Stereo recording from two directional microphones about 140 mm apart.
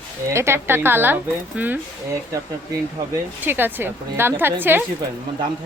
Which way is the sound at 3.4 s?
15° right (ahead or behind).